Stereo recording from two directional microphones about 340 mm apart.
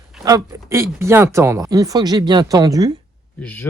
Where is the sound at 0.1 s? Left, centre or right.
Centre.